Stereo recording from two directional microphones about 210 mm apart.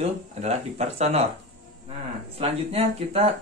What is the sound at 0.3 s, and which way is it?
Speech, 30° right (ahead or behind).